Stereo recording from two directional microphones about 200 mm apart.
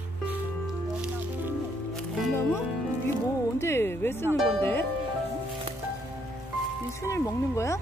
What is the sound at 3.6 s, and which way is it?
Speech, 10° left (ahead or behind).